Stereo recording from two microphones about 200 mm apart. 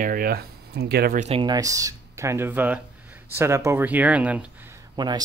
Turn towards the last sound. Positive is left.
turn(degrees=-20)  # may be behind; listen again after turning